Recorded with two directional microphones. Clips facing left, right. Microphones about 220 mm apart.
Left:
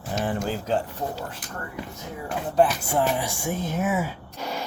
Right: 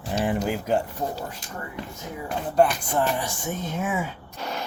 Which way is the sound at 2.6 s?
5° left (ahead or behind).